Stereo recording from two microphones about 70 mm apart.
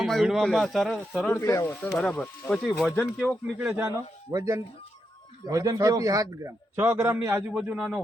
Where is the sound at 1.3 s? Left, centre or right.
Left.